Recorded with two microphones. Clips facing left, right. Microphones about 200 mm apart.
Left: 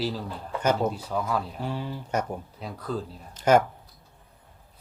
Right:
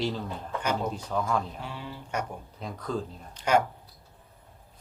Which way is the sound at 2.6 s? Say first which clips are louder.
Right 2 dB; 5° left (ahead or behind).